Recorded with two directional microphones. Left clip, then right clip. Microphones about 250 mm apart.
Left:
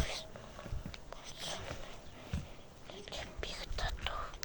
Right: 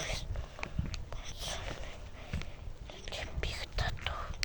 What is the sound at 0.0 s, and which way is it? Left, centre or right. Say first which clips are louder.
Whispering: right 2 dB; centre.